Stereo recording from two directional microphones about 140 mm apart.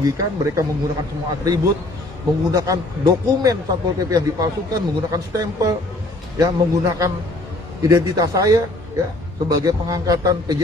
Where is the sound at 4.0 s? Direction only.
25° right (ahead or behind).